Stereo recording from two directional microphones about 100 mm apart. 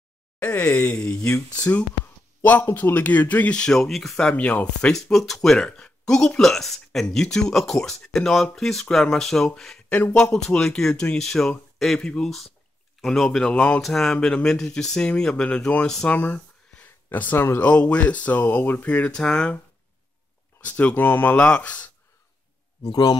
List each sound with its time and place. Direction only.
0.4 s speech: 15° left (ahead or behind)
4.9 s speech: 5° left (ahead or behind)
20.6 s speech: 15° left (ahead or behind)
22.8 s speech: 45° left (ahead or behind)